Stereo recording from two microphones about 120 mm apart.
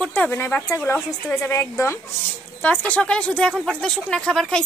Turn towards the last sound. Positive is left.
turn(degrees=5)  # may be behind; listen again after turning